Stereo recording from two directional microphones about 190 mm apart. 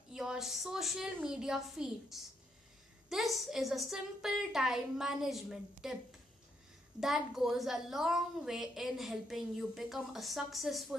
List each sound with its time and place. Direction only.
0.1 s a woman's voice: 5° right (ahead or behind)
7.0 s a woman's voice: centre (ahead or behind)